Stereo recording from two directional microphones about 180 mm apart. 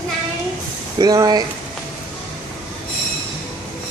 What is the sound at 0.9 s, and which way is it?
Speech, 20° right (ahead or behind).